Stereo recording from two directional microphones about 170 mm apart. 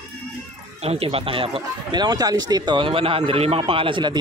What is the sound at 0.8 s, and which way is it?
Speech, 35° right (ahead or behind).